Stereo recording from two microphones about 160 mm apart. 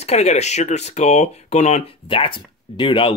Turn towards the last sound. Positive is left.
turn(degrees=30)  # may be behind; listen again after turning